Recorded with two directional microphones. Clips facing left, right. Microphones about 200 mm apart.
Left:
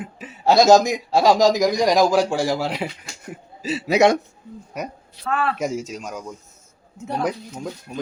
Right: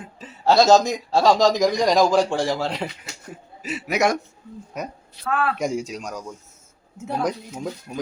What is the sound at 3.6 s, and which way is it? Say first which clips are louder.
Speech: left 5 dB; 30° left (ahead or behind).